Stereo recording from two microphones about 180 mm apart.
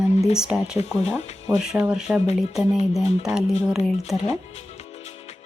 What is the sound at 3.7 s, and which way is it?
Speech, centre (ahead or behind).